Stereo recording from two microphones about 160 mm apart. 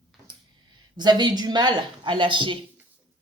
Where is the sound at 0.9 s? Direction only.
25° right (ahead or behind).